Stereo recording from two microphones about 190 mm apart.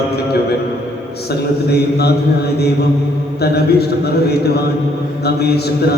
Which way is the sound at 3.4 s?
55° left (ahead or behind).